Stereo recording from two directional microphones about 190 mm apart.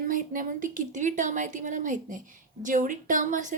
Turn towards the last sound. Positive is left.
turn(degrees=-40)  # may be behind; listen again after turning